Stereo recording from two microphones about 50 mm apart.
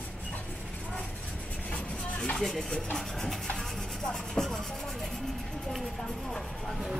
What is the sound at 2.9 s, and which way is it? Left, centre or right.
Rub, centre.